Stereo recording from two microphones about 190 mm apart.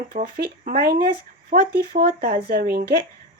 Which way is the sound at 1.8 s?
50° right (ahead or behind).